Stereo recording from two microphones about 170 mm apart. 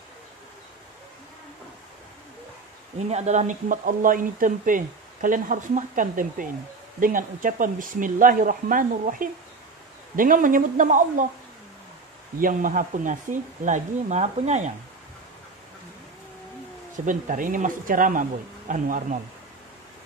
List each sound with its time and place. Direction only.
3.0 s speech: 40° right (ahead or behind)
12.4 s speech: 55° right (ahead or behind)
16.9 s speech: 50° right (ahead or behind)